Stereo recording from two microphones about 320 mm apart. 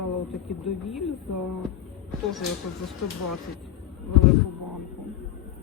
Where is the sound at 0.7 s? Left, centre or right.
Left.